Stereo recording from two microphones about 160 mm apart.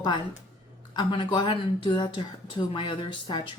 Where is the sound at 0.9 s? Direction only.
30° left (ahead or behind).